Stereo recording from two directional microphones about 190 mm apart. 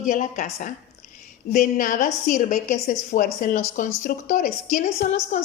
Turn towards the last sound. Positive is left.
turn(degrees=45)  # may be behind; listen again after turning